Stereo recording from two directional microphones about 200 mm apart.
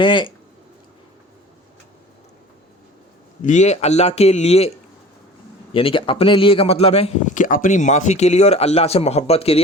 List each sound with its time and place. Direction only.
0.0 s speech: 25° left (ahead or behind)
3.4 s a man's voice: 35° left (ahead or behind)
5.7 s a man's voice: 25° left (ahead or behind)